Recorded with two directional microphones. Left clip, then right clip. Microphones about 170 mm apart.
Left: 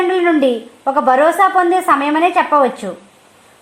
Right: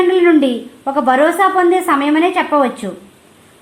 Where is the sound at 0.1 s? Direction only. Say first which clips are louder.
Right 2 dB; 30° left (ahead or behind).